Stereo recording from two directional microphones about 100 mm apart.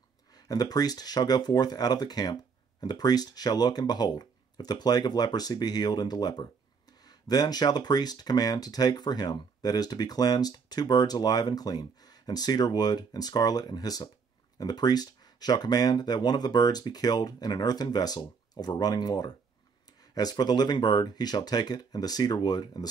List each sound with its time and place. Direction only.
0.3 s speech: 40° left (ahead or behind)